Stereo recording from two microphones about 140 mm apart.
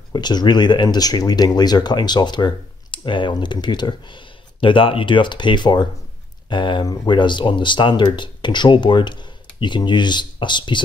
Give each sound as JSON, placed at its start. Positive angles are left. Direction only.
{"t": 0.1, "sound": "speech", "side_deg": 30}